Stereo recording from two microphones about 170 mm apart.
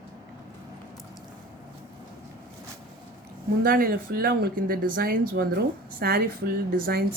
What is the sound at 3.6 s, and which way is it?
Speech, 55° right (ahead or behind).